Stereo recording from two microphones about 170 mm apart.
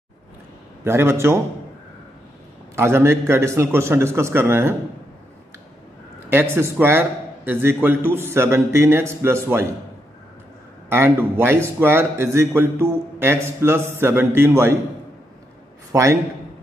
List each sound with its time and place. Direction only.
0.8 s a man's voice: 15° right (ahead or behind)
2.7 s a man's voice: 15° right (ahead or behind)
6.3 s a man's voice: 15° right (ahead or behind)
10.9 s a man's voice: 15° right (ahead or behind)
15.9 s a man's voice: 15° right (ahead or behind)